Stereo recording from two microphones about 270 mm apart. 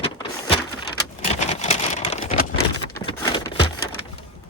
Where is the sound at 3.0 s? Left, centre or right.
Centre.